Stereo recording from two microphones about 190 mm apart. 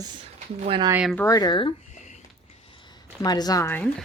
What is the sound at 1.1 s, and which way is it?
Speech, 15° left (ahead or behind).